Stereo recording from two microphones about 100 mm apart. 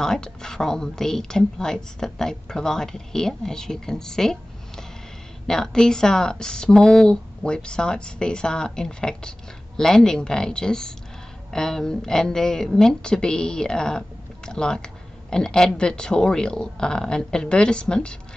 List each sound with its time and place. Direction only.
0.0 s a woman's voice: 5° left (ahead or behind)
5.5 s a woman's voice: 5° left (ahead or behind)